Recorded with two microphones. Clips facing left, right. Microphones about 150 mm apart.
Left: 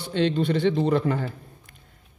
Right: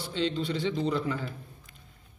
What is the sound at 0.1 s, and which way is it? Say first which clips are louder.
Speech: left 7 dB; 60° left (ahead or behind).